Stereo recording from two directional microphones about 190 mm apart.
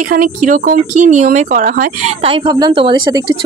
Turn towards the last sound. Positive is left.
turn(degrees=-25)  # may be behind; listen again after turning